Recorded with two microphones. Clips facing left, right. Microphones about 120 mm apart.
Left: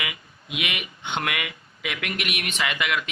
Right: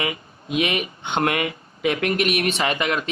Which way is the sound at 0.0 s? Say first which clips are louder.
Right 7 dB; 35° right (ahead or behind).